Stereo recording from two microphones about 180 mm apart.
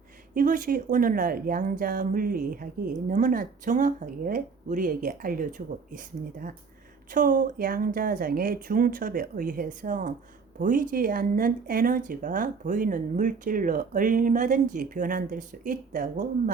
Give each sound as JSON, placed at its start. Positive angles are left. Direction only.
{"t": 0.3, "sound": "speech", "side_deg": -50}